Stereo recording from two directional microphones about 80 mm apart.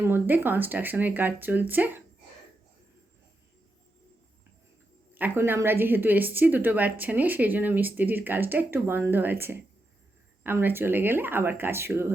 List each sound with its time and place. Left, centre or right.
0.0 s a woman's voice: right
5.1 s a woman's voice: right